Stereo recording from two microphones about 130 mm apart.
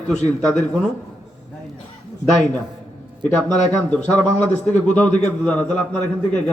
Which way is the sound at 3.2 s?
15° left (ahead or behind).